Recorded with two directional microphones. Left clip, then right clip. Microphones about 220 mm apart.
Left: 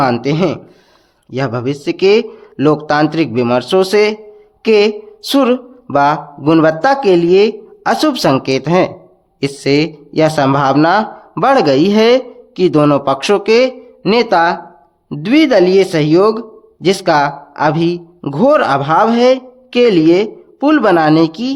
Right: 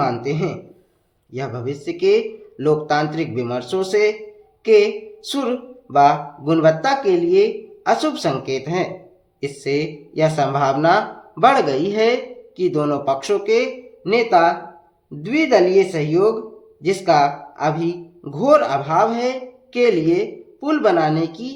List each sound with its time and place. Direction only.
0.0 s speech: 40° left (ahead or behind)